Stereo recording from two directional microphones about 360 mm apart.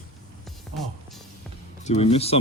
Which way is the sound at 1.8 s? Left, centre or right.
Centre.